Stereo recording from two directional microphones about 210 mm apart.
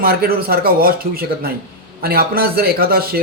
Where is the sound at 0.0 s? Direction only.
45° right (ahead or behind).